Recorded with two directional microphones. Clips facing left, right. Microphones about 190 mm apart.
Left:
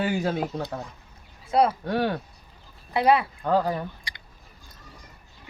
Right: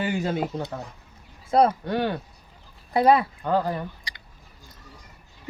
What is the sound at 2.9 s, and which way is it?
Speech, 40° right (ahead or behind).